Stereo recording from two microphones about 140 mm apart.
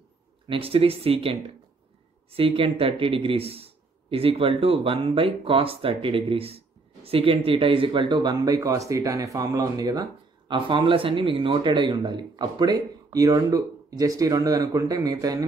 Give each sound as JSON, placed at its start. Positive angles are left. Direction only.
{"t": 0.5, "sound": "speech", "side_deg": -40}
{"t": 10.5, "sound": "speech", "side_deg": -40}